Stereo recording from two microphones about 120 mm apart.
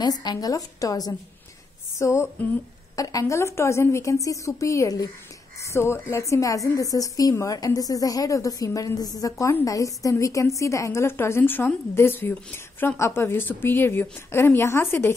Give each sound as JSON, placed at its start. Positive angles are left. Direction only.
{"t": 0.0, "sound": "a woman's voice", "side_deg": 35}
{"t": 2.0, "sound": "a sound", "side_deg": 25}
{"t": 3.0, "sound": "a woman's voice", "side_deg": 30}